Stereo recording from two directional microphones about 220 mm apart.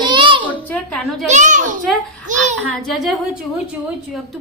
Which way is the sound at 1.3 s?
35° right (ahead or behind).